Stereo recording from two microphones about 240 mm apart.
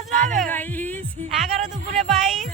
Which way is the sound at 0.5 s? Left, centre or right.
Centre.